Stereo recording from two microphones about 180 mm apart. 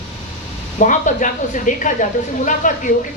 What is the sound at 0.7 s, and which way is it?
A woman's voice, 45° left (ahead or behind).